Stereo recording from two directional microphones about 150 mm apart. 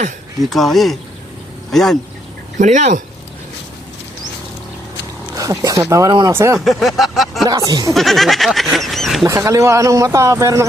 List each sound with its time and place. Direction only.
0.5 s goat: centre (ahead or behind)
2.6 s speech: 55° right (ahead or behind)
5.4 s speech: 20° right (ahead or behind)
6.7 s goat: centre (ahead or behind)
7.7 s speech: 25° right (ahead or behind)
7.9 s goat: centre (ahead or behind)
9.2 s speech: 20° right (ahead or behind)